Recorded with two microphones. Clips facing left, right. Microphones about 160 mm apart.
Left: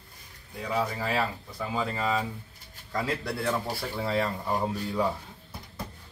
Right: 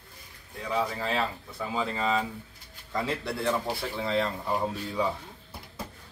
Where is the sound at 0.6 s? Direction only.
5° left (ahead or behind).